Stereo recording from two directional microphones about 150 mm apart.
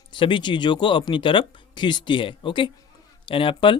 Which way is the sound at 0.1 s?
30° left (ahead or behind).